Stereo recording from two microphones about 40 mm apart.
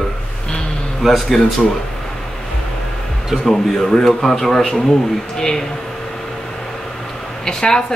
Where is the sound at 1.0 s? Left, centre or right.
Centre.